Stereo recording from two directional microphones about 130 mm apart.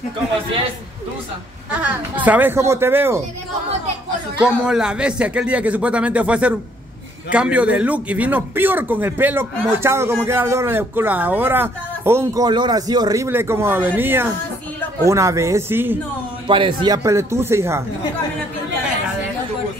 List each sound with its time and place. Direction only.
1.7 s a man's voice: 10° right (ahead or behind)
4.4 s a man's voice: 5° right (ahead or behind)
12.4 s speech: 35° right (ahead or behind); by 16.0 s 15° right (ahead or behind)
16.4 s a man's voice: 40° right (ahead or behind)
17.0 s speech: 20° right (ahead or behind)